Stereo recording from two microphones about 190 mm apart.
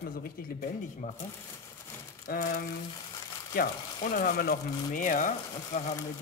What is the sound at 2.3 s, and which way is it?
Speech, 50° left (ahead or behind).